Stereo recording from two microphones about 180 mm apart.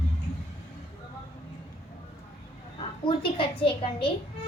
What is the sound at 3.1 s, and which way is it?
A woman's voice, 30° left (ahead or behind).